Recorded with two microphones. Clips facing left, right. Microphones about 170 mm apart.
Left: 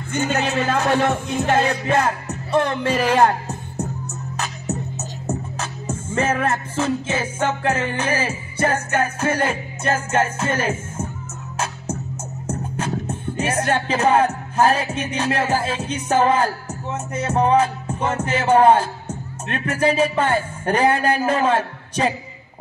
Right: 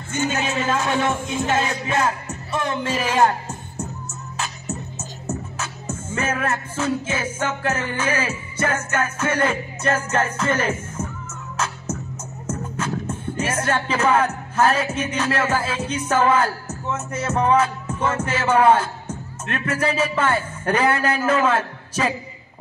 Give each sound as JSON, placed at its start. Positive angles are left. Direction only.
{"t": 0.1, "sound": "speech", "side_deg": 55}
{"t": 5.2, "sound": "music", "side_deg": 35}
{"t": 13.5, "sound": "music", "side_deg": 35}